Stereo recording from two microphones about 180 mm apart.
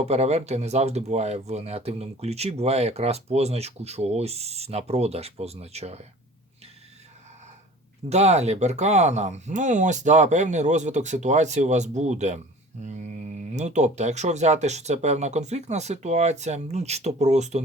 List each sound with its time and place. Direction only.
0.0 s speech: 35° right (ahead or behind)
8.1 s speech: 40° right (ahead or behind)